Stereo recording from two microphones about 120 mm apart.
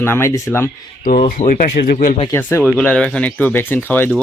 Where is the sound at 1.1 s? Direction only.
90° left.